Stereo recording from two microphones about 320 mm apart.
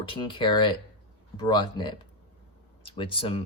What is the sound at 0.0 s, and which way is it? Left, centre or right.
Speech, centre.